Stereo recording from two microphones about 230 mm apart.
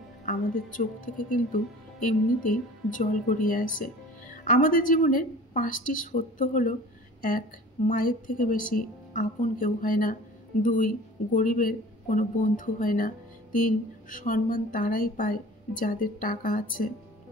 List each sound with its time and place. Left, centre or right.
0.2 s a woman's voice: left